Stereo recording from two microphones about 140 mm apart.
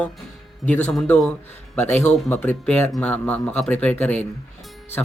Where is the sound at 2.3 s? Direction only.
10° left (ahead or behind).